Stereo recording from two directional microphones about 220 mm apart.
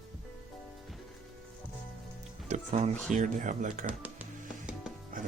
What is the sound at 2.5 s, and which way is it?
Speech, 30° right (ahead or behind).